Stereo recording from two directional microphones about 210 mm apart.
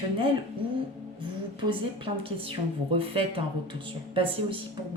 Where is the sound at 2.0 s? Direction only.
25° right (ahead or behind).